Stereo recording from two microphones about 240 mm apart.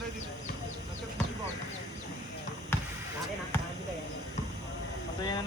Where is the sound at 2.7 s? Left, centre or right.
Centre.